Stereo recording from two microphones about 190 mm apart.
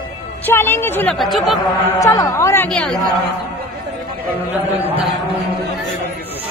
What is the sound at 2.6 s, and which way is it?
Speech, 5° left (ahead or behind).